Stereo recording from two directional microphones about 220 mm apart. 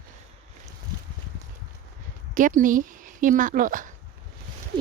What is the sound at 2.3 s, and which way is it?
Speech, 35° right (ahead or behind).